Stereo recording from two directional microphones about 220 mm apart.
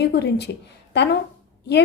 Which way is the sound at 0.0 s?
50° left (ahead or behind).